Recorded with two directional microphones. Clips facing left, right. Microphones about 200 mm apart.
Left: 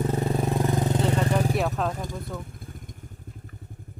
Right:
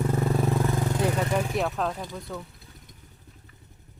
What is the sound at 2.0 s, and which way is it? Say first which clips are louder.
Speech: left 2 dB; 45° left (ahead or behind).